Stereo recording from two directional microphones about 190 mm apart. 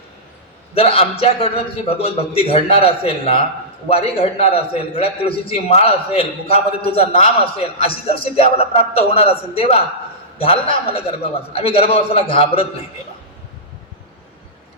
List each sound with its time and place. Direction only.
0.7 s a man's voice: 30° left (ahead or behind)